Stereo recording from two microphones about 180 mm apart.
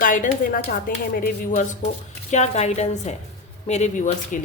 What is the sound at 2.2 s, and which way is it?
A woman's voice, 40° left (ahead or behind).